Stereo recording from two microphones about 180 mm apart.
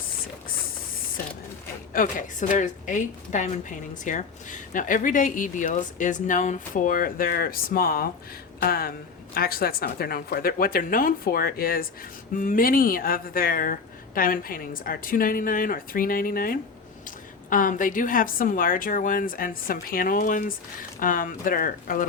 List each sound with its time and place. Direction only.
1.9 s a woman's voice: 50° left (ahead or behind)